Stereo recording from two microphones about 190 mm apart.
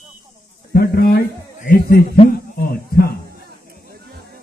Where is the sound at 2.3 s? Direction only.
55° left (ahead or behind).